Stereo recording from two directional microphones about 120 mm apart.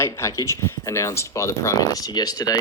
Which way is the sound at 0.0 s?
25° left (ahead or behind).